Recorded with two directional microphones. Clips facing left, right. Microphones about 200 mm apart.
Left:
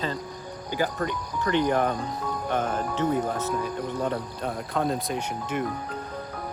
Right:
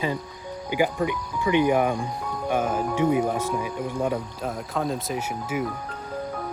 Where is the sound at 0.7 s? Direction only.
10° right (ahead or behind).